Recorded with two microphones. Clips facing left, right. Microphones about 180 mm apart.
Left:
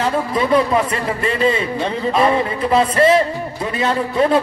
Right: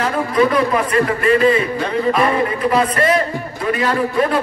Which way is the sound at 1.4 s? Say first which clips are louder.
Right 2 dB; 25° left (ahead or behind).